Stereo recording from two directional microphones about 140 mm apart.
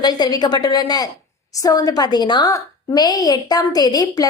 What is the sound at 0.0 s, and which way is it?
A woman's voice, 30° left (ahead or behind).